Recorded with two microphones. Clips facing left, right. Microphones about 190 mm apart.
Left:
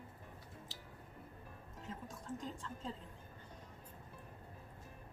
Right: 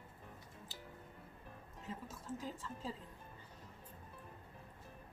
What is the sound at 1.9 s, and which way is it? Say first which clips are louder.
A woman's voice: even; 5° right (ahead or behind).